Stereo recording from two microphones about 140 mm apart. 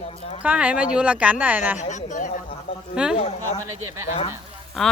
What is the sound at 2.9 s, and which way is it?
Speech, 5° right (ahead or behind).